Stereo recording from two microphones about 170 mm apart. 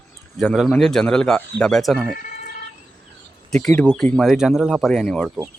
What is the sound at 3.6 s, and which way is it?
Speech, 10° left (ahead or behind).